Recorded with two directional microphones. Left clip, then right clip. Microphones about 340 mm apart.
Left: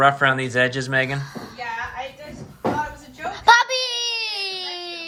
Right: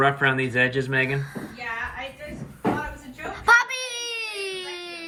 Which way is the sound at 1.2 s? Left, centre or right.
Left.